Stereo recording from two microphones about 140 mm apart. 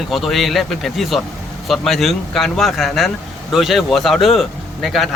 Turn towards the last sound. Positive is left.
turn(degrees=0)  # may be behind; listen again after turning